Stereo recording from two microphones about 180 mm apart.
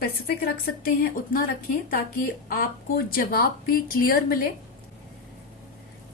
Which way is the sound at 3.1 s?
55° left (ahead or behind).